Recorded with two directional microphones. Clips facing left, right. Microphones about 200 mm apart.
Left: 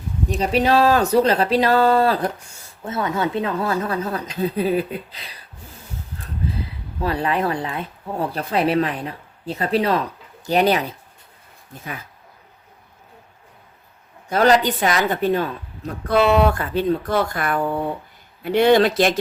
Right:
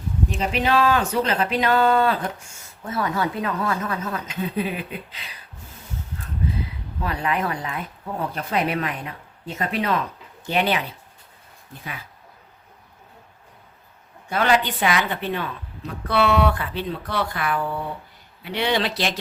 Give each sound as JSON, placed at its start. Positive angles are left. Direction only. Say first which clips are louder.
{"t": 0.3, "sound": "speech", "louder": "left 5 dB", "side_deg": 40}
{"t": 2.8, "sound": "speech", "louder": "left 2 dB", "side_deg": 25}
{"t": 7.0, "sound": "speech", "louder": "left 4 dB", "side_deg": 30}
{"t": 14.3, "sound": "a woman's voice", "louder": "left 5 dB", "side_deg": 40}